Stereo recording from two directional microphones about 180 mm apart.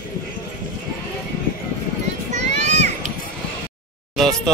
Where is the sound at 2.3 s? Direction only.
40° right (ahead or behind).